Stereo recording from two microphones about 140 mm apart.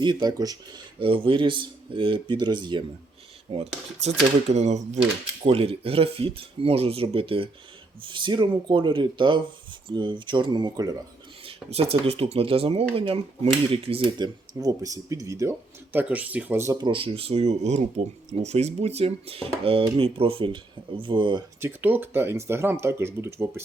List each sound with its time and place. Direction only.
0.0 s speech: 30° right (ahead or behind)
3.5 s speech: 50° right (ahead or behind)
5.5 s speech: 45° right (ahead or behind)
11.4 s speech: 45° right (ahead or behind); by 16.7 s 15° right (ahead or behind)
16.8 s speech: 40° right (ahead or behind)
21.6 s speech: 15° right (ahead or behind)